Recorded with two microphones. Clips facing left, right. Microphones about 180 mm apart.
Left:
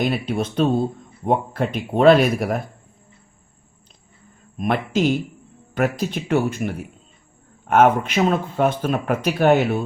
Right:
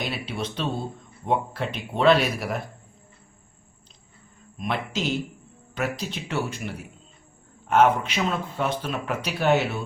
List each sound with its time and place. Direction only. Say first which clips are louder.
0.3 s speech: left 9 dB; 50° left (ahead or behind)
4.5 s speech: left 7 dB; 50° left (ahead or behind)